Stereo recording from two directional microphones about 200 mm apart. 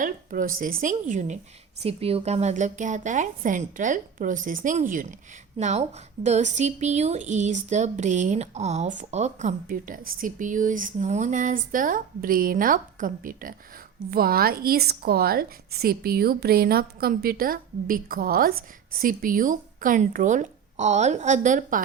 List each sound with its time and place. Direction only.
0.0 s a woman's voice: 45° right (ahead or behind)